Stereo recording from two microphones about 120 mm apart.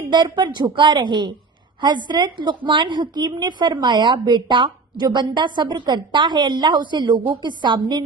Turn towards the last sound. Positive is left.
turn(degrees=-35)  # may be behind; listen again after turning